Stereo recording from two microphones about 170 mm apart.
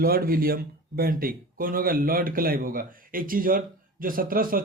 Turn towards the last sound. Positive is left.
turn(degrees=-55)  # may be behind; listen again after turning